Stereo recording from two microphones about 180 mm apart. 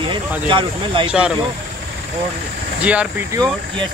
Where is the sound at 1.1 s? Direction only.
5° right (ahead or behind).